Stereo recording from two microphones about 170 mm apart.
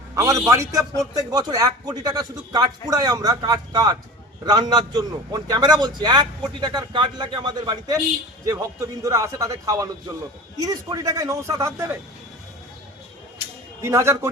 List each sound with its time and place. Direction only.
0.1 s a man's voice: 20° right (ahead or behind)
13.8 s a man's voice: 15° right (ahead or behind)